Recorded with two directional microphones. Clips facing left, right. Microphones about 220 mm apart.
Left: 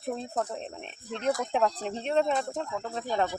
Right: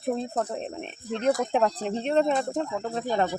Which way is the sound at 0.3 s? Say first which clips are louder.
Right 3 dB; 5° right (ahead or behind).